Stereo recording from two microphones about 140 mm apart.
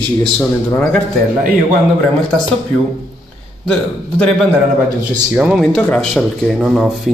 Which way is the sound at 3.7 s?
5° left (ahead or behind).